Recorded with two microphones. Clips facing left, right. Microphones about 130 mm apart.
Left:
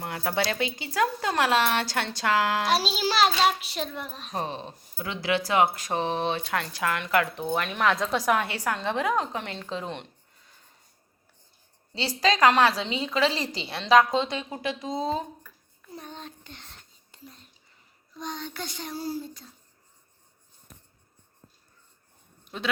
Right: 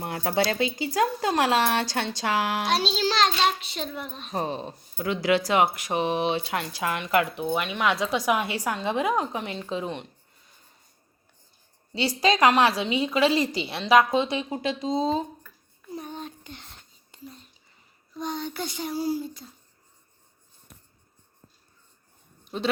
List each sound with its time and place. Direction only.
0.0 s speech: 25° right (ahead or behind)
2.6 s a child's voice: 5° left (ahead or behind)
5.5 s a woman's voice: 20° right (ahead or behind)
7.3 s a child's voice: 10° right (ahead or behind)
8.4 s a woman's voice: 15° right (ahead or behind)
11.9 s a woman's voice: 15° right (ahead or behind)
14.6 s speech: 25° right (ahead or behind)
15.9 s a sound: 10° right (ahead or behind)
17.1 s whispering: 10° right (ahead or behind)
18.2 s a woman's voice: 10° right (ahead or behind)